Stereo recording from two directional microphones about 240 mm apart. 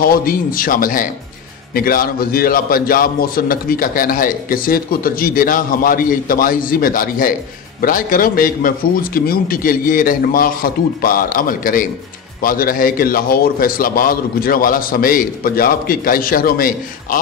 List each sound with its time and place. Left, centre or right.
0.0 s a man's voice: left